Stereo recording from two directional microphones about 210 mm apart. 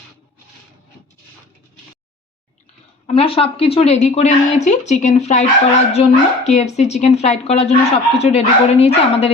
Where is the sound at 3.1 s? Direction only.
25° left (ahead or behind).